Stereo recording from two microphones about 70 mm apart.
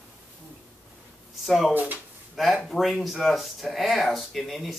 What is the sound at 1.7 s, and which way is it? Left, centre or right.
Speech, right.